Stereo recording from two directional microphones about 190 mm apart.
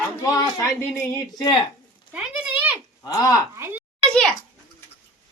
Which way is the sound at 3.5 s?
15° right (ahead or behind).